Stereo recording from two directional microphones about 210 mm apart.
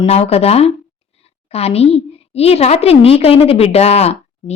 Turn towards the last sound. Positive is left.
turn(degrees=30)  # may be behind; listen again after turning